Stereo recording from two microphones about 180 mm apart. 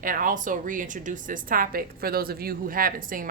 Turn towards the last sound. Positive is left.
turn(degrees=-50)  # may be behind; listen again after turning